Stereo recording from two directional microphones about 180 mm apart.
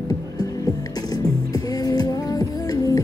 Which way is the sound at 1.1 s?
20° left (ahead or behind).